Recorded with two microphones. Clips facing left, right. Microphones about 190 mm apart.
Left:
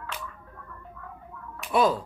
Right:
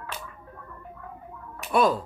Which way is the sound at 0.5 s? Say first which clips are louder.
Right 2 dB; 20° right (ahead or behind).